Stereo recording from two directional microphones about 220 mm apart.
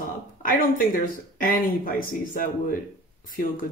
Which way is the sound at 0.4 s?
40° left (ahead or behind).